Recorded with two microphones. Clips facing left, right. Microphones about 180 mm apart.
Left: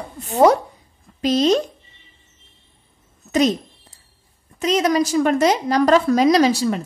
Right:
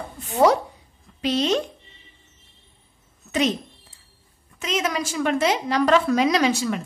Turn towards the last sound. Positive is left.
turn(degrees=35)  # may be behind; listen again after turning